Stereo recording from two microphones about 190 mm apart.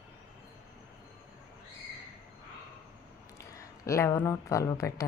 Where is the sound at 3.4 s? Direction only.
15° left (ahead or behind).